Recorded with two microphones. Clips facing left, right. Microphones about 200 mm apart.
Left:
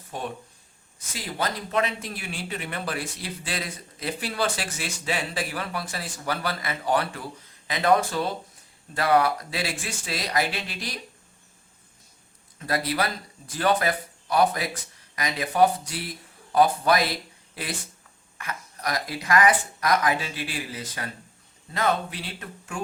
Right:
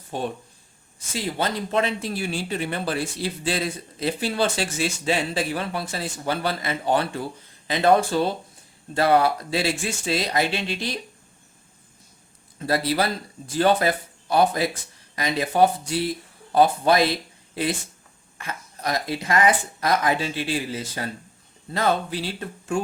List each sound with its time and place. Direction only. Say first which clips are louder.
0.1 s speech: right 5 dB; 30° right (ahead or behind)
12.5 s speech: right 4 dB; 30° right (ahead or behind)